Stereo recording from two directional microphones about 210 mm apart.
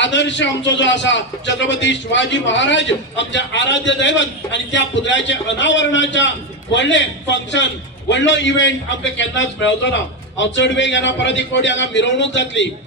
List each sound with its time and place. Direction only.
0.0 s a man's voice: 60° left (ahead or behind)